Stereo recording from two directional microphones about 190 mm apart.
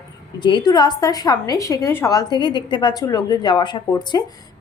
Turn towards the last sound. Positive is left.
turn(degrees=25)  # may be behind; listen again after turning